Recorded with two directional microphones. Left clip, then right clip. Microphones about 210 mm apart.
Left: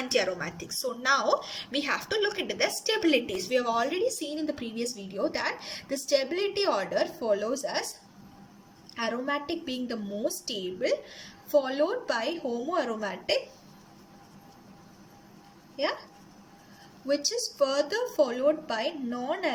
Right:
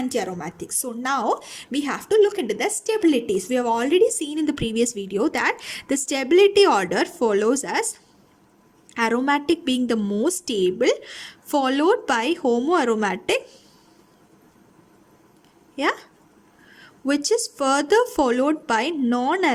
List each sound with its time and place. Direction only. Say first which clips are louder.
0.1 s a woman's voice: right 1 dB; 25° right (ahead or behind); by 7.9 s 50° right (ahead or behind)
9.0 s a woman's voice: right 9 dB; 50° right (ahead or behind)
15.7 s speech: right 7 dB; 50° right (ahead or behind)
17.1 s a woman's voice: right 7 dB; 55° right (ahead or behind)